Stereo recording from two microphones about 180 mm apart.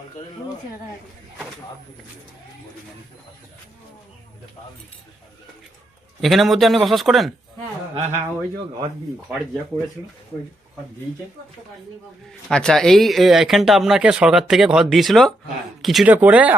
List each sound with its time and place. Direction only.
6.2 s speech: centre (ahead or behind)
7.9 s speech: 40° right (ahead or behind)
12.5 s speech: 5° left (ahead or behind)